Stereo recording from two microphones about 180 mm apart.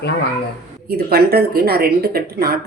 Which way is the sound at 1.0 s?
60° right (ahead or behind).